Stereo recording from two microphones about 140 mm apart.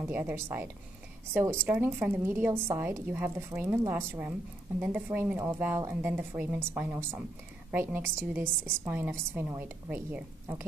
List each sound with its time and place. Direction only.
0.1 s a woman's voice: 15° right (ahead or behind)